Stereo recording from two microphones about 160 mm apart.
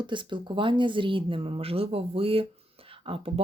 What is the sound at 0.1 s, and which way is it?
Speech, 30° right (ahead or behind).